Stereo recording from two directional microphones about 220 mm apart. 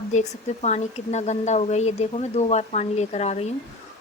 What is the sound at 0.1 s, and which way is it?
A woman's voice, 30° left (ahead or behind).